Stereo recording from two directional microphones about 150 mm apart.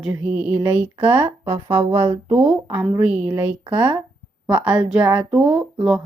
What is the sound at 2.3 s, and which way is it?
Speech, 10° right (ahead or behind).